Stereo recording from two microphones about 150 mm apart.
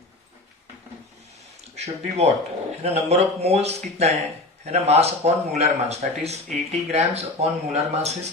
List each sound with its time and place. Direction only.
1.7 s speech: 45° right (ahead or behind)